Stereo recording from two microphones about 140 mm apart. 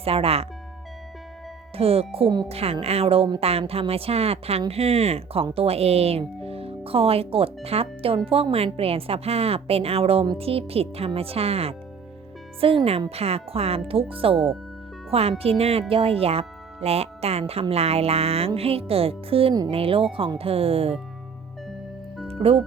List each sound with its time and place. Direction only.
0.0 s speech: 45° right (ahead or behind)
1.7 s speech: 45° right (ahead or behind)
22.4 s speech: 45° right (ahead or behind)